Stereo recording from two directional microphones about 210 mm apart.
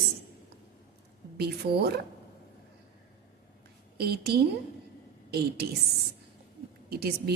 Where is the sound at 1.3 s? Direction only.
50° right (ahead or behind).